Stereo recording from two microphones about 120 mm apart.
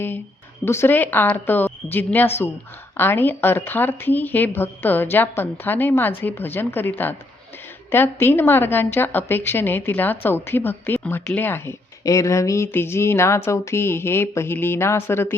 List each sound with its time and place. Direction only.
0.6 s a woman's voice: 20° left (ahead or behind)